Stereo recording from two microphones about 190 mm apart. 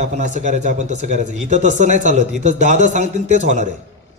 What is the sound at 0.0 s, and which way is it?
Speech, 35° right (ahead or behind).